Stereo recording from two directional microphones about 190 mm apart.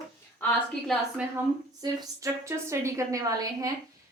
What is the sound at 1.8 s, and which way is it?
A woman's voice, 15° right (ahead or behind).